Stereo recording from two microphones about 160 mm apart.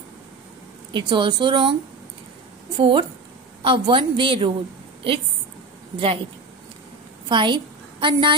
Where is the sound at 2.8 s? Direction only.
35° right (ahead or behind).